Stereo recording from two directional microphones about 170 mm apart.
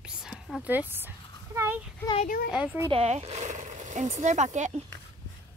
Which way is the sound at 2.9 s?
40° right (ahead or behind).